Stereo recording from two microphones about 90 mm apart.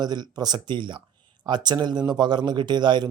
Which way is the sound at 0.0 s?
50° right (ahead or behind).